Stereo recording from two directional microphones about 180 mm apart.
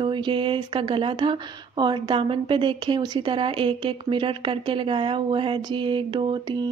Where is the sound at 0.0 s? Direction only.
30° right (ahead or behind).